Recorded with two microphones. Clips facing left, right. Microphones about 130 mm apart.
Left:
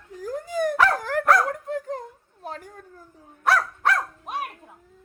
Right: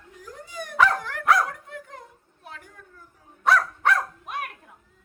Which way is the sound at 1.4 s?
35° left (ahead or behind).